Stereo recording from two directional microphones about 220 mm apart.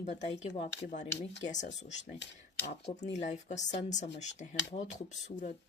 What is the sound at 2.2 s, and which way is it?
Speech, 50° left (ahead or behind).